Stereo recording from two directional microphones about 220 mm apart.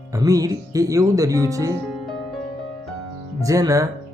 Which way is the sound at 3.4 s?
15° right (ahead or behind).